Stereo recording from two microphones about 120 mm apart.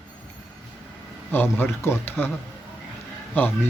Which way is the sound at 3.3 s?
15° left (ahead or behind).